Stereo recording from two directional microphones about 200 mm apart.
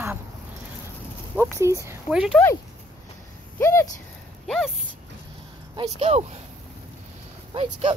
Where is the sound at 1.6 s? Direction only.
15° right (ahead or behind).